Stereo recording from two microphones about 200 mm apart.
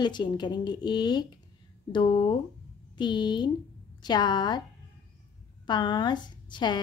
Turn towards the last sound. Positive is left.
turn(degrees=20)  # may be behind; listen again after turning